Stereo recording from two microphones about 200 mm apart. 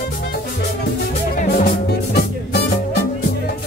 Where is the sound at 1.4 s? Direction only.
45° left (ahead or behind).